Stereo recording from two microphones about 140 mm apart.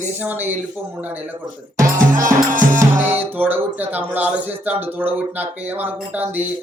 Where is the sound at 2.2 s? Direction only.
70° right (ahead or behind).